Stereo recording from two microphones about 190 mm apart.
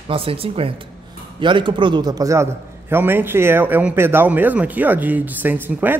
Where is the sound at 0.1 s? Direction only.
30° right (ahead or behind).